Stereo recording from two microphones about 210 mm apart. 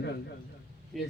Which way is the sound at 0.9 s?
Centre (ahead or behind).